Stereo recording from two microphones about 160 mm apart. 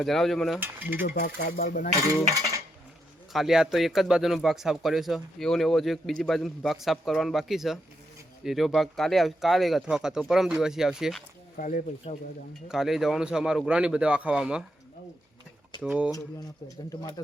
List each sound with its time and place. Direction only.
0.0 s speech: centre (ahead or behind)
0.6 s mechanisms: 10° right (ahead or behind)
1.2 s speech: 70° left (ahead or behind)
3.3 s speech: centre (ahead or behind)
11.5 s speech: 60° left (ahead or behind)
12.1 s speech: 40° left (ahead or behind)
12.6 s speech: centre (ahead or behind)
15.8 s mechanisms: 5° right (ahead or behind)
16.6 s speech: 20° left (ahead or behind)